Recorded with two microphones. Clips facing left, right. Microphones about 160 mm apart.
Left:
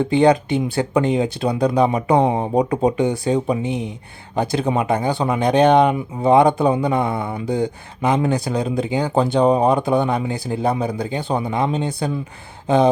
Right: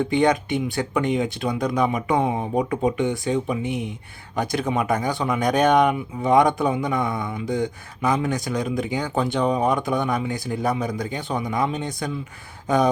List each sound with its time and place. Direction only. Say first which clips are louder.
0.0 s speech: left 5 dB; 30° left (ahead or behind)